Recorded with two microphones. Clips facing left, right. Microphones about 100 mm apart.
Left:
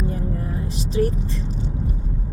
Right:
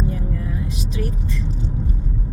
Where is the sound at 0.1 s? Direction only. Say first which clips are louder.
Even; 35° left (ahead or behind).